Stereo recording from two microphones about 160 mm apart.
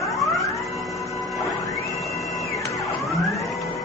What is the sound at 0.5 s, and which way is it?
Music, centre (ahead or behind).